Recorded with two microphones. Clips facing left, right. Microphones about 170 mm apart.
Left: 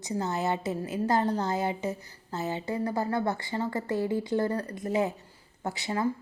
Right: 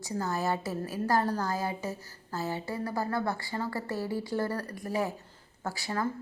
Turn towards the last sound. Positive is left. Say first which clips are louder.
# left 2 dB
turn(degrees=20)  # may be behind; listen again after turning